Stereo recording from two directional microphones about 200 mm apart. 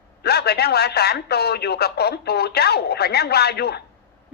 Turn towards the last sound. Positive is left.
turn(degrees=55)  # may be behind; listen again after turning